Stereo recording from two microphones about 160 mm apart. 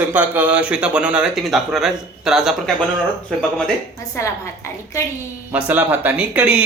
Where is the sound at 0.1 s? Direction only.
10° right (ahead or behind).